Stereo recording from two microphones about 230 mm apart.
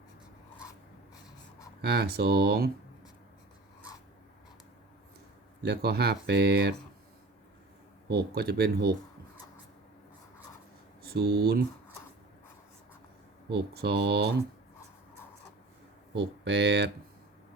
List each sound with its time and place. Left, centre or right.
0.7 s writing: centre
1.8 s speech: right
5.6 s speech: right
8.0 s speech: right
11.0 s speech: right
13.5 s speech: right
16.1 s speech: right